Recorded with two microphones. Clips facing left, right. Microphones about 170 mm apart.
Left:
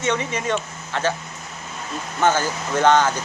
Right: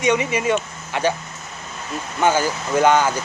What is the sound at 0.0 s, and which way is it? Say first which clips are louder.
Speech: right 4 dB; 10° right (ahead or behind).